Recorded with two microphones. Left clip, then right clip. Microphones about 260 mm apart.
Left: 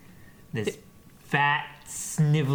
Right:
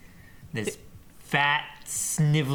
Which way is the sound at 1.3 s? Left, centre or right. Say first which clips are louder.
Even; left.